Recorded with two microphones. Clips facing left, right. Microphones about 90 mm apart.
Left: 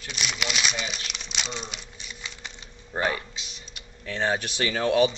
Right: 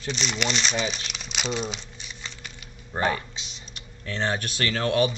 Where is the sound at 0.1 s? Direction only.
5° left (ahead or behind).